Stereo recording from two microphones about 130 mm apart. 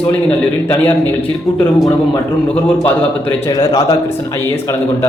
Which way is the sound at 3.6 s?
25° left (ahead or behind).